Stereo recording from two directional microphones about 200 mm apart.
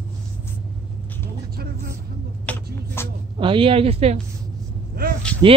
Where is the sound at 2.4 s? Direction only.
10° left (ahead or behind).